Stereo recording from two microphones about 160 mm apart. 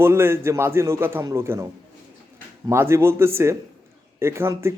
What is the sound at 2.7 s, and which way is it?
Speech, 15° right (ahead or behind).